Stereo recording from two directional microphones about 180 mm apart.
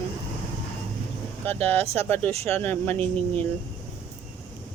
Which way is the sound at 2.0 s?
10° left (ahead or behind).